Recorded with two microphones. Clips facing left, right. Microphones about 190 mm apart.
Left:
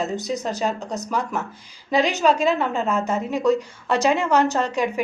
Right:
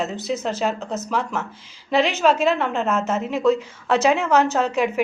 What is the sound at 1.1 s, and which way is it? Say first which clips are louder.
A woman's voice: even; centre (ahead or behind).